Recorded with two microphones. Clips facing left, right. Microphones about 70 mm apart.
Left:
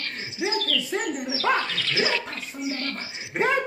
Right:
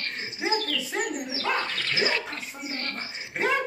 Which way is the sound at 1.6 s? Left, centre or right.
Right.